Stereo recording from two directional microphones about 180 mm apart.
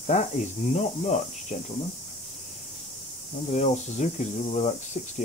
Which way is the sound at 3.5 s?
40° left (ahead or behind).